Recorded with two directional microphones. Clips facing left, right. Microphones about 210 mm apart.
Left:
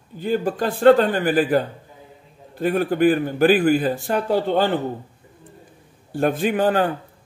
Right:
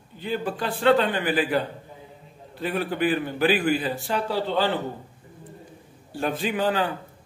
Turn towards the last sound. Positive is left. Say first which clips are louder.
# left 5 dB
turn(degrees=50)  # may be behind; listen again after turning